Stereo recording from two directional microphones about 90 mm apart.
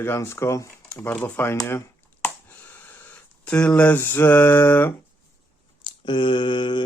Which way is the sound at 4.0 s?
20° left (ahead or behind).